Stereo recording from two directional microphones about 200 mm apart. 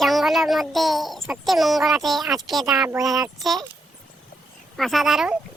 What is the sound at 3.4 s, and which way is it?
Speech, centre (ahead or behind).